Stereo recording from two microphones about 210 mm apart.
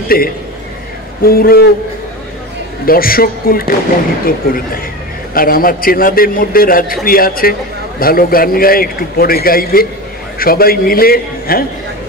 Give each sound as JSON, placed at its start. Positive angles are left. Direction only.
{"t": 0.1, "sound": "a man's voice", "side_deg": 45}
{"t": 2.8, "sound": "a man's voice", "side_deg": 45}